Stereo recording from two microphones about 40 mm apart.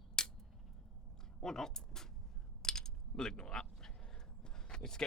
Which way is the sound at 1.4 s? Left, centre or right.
Centre.